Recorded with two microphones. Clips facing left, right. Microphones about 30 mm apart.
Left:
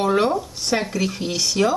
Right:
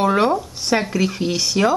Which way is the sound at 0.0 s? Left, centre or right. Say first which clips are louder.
Right 2 dB; centre.